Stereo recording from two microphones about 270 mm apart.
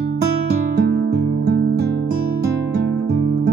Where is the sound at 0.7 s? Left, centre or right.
Right.